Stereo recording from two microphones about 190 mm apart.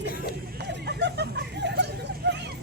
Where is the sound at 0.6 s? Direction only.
65° right (ahead or behind).